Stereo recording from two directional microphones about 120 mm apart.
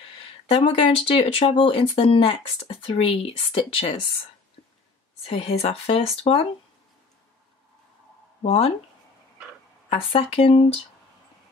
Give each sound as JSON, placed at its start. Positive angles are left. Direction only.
{"t": 0.5, "sound": "speech", "side_deg": 55}
{"t": 5.2, "sound": "speech", "side_deg": 55}
{"t": 8.4, "sound": "speech", "side_deg": 65}
{"t": 9.8, "sound": "speech", "side_deg": 55}